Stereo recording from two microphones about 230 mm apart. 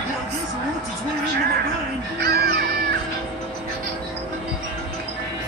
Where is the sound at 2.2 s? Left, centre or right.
Right.